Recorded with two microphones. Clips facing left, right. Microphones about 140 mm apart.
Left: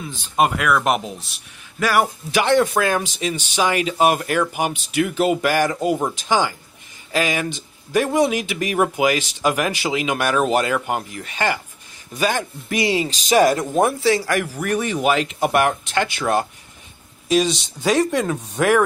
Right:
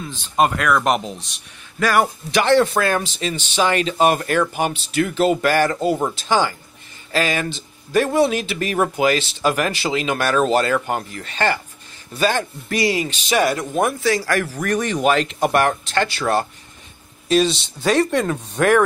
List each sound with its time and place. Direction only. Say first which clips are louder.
0.1 s speech: right 1 dB; 10° left (ahead or behind)
13.1 s speech: left 3 dB; 40° left (ahead or behind); by 18.8 s 10° left (ahead or behind)